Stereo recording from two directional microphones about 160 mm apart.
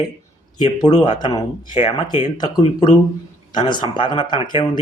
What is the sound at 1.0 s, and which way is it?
Speech, 25° left (ahead or behind).